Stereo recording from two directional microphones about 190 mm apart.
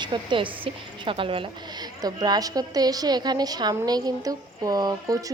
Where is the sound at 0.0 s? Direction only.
25° right (ahead or behind).